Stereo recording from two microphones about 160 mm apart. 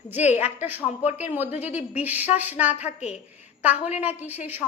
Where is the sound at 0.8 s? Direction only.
40° left (ahead or behind).